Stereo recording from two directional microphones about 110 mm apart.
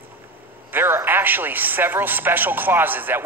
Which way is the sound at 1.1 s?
20° right (ahead or behind).